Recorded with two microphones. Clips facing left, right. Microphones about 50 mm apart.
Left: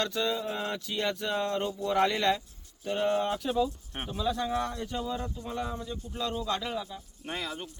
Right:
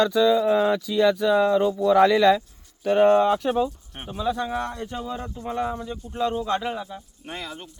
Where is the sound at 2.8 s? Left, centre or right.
Right.